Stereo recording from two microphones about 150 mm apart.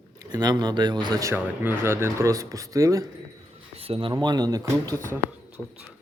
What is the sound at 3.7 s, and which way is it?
Speech, 40° right (ahead or behind).